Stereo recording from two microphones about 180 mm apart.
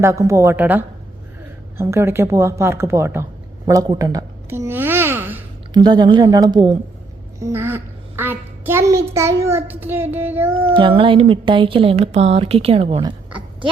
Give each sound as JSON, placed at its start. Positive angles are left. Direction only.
{"t": 0.0, "sound": "a woman's voice", "side_deg": -15}
{"t": 3.7, "sound": "a sound", "side_deg": -20}
{"t": 5.7, "sound": "a woman's voice", "side_deg": -25}
{"t": 10.7, "sound": "a woman's voice", "side_deg": -30}